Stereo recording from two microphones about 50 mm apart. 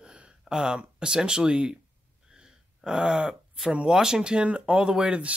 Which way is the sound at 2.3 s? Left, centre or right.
Centre.